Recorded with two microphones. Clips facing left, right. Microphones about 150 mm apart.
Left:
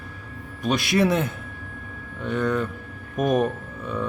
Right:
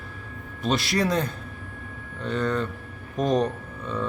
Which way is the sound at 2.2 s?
Centre (ahead or behind).